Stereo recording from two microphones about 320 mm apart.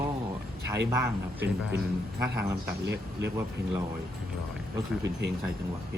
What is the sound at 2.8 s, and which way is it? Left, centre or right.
Speech, right.